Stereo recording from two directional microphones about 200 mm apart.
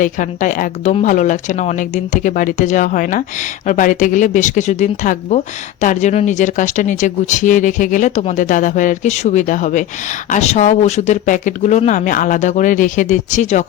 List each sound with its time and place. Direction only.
0.0 s speech: 40° left (ahead or behind)